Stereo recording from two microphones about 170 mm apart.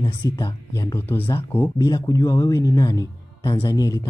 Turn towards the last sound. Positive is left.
turn(degrees=20)  # may be behind; listen again after turning